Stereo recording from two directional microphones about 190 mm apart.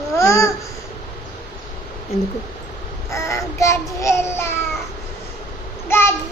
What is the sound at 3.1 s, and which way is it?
Child singing, 15° left (ahead or behind).